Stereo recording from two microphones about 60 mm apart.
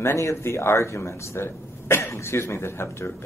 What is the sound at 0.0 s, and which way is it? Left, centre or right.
Speech, left.